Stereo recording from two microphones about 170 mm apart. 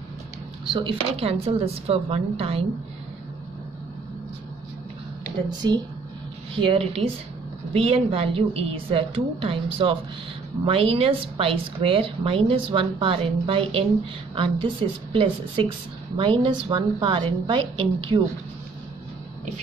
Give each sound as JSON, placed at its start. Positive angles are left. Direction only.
{"t": 0.7, "sound": "speech", "side_deg": -30}
{"t": 5.5, "sound": "a woman's voice", "side_deg": -25}